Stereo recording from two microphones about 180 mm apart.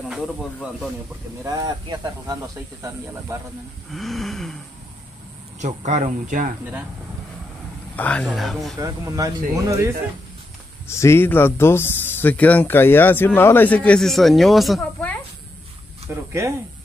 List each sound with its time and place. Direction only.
0.1 s speech: centre (ahead or behind)
1.4 s speech: 20° right (ahead or behind)
3.9 s speech: centre (ahead or behind)
5.6 s speech: 40° right (ahead or behind)
7.9 s speech: 5° left (ahead or behind)
8.7 s speech: 20° right (ahead or behind)
10.9 s speech: 15° left (ahead or behind)
16.3 s speech: 15° right (ahead or behind)